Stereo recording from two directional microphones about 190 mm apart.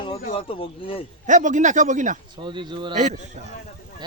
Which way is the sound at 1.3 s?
40° right (ahead or behind).